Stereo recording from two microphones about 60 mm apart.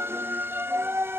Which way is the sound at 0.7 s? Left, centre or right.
Right.